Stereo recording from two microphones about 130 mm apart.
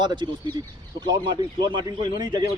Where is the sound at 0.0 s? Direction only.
35° right (ahead or behind).